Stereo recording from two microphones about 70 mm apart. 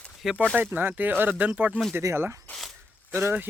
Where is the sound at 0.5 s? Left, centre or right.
Right.